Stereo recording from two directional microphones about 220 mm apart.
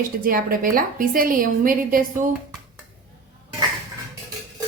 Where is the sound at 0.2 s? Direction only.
40° right (ahead or behind).